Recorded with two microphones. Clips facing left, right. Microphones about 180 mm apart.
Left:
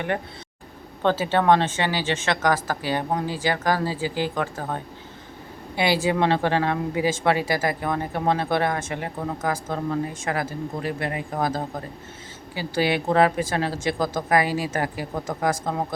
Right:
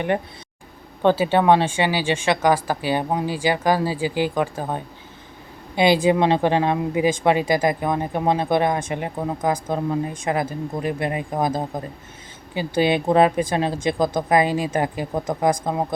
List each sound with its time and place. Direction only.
1.0 s speech: 15° right (ahead or behind)